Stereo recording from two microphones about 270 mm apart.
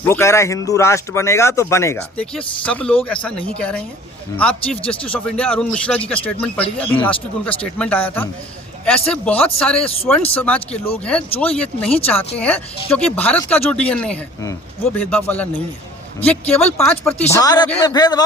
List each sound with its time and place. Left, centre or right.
0.0 s speech: centre
9.8 s speech: left
10.3 s speech: centre